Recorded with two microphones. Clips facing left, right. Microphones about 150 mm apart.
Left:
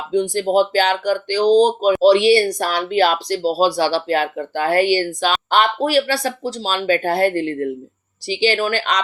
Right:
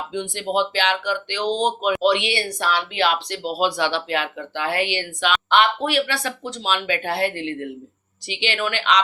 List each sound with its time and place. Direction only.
0.1 s speech: 40° left (ahead or behind)